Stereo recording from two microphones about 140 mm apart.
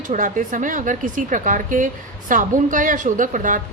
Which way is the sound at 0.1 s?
65° right (ahead or behind).